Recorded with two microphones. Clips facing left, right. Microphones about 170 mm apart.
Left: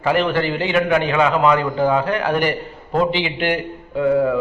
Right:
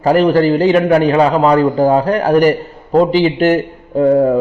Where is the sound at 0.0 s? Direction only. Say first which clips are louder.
Right 8 dB; 40° right (ahead or behind).